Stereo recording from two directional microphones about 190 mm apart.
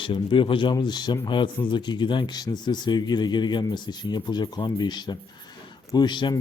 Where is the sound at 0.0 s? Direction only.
25° left (ahead or behind).